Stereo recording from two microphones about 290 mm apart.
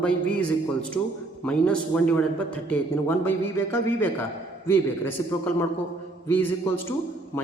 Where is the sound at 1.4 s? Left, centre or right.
Centre.